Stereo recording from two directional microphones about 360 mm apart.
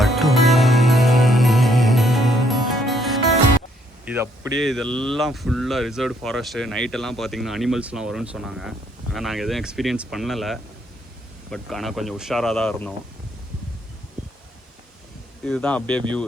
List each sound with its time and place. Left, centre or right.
0.0 s music: centre
4.0 s speech: centre
15.4 s speech: centre